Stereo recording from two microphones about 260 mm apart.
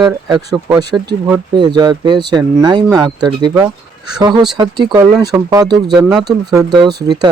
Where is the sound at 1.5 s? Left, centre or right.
Centre.